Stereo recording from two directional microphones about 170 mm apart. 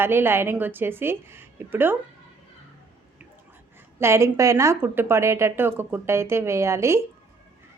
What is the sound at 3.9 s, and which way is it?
Speech, 15° right (ahead or behind).